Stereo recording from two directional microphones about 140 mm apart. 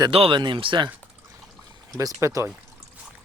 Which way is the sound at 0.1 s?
40° right (ahead or behind).